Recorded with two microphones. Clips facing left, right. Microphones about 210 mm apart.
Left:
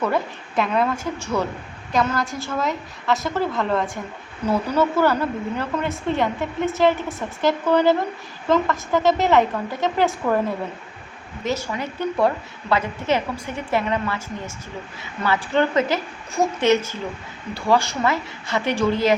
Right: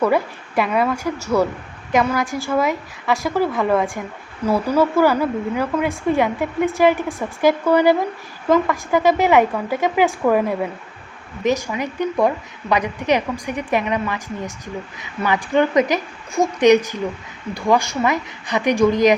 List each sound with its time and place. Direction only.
0.0 s a woman's voice: 10° right (ahead or behind)
11.4 s a woman's voice: 15° right (ahead or behind)